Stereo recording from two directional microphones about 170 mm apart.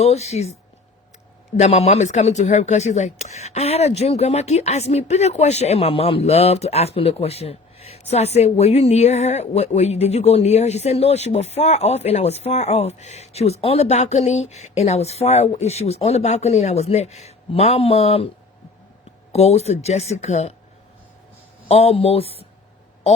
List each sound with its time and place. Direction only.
0.0 s speech: 40° left (ahead or behind)
1.5 s speech: 40° left (ahead or behind)
19.3 s speech: 40° left (ahead or behind)
21.7 s speech: 35° left (ahead or behind)